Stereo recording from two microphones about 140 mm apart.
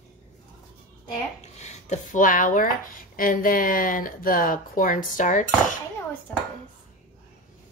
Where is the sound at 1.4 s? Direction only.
55° left (ahead or behind).